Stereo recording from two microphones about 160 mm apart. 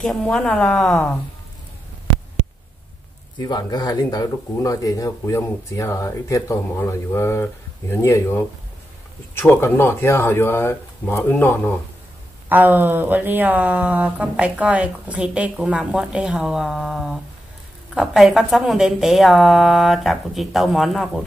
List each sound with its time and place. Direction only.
0.0 s a woman's voice: 5° left (ahead or behind)
3.3 s speech: 25° left (ahead or behind)
12.4 s a woman's voice: 10° right (ahead or behind)